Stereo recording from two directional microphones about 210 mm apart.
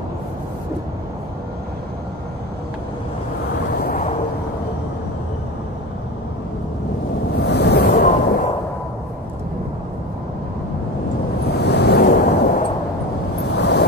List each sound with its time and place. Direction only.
3.7 s vehicle: 45° left (ahead or behind)
7.3 s waves: 50° left (ahead or behind)
11.4 s waves: 50° left (ahead or behind)